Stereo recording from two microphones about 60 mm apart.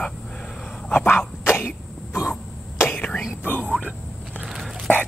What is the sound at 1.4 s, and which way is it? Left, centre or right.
Throat clearing, left.